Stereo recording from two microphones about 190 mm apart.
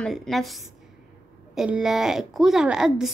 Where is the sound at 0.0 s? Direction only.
Centre (ahead or behind).